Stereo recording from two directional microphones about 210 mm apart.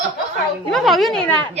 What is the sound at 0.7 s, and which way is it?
Speech, centre (ahead or behind).